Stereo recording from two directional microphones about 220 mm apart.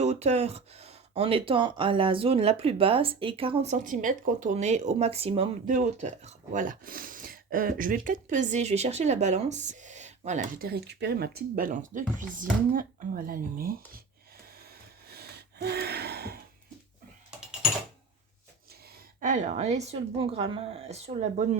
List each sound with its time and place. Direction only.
0.0 s speech: 30° right (ahead or behind)
14.6 s a sound: 45° right (ahead or behind)
19.2 s speech: 35° right (ahead or behind)